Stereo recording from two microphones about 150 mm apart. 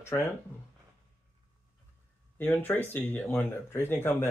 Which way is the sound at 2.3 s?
15° left (ahead or behind).